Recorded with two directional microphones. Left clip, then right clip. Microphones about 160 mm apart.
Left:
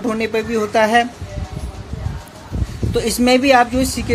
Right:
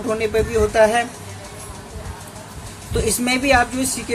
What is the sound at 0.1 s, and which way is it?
Speech, 45° left (ahead or behind).